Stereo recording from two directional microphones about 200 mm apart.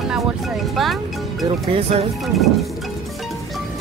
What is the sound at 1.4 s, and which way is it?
Speech, 30° right (ahead or behind).